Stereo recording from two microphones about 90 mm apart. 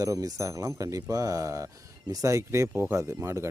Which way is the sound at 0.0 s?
40° right (ahead or behind).